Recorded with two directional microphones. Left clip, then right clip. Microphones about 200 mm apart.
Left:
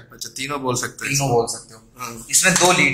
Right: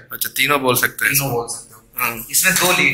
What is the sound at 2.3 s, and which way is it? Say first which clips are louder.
Speech: left 1 dB; 50° left (ahead or behind).